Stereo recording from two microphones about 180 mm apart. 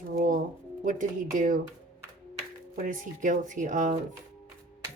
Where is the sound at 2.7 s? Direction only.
45° right (ahead or behind).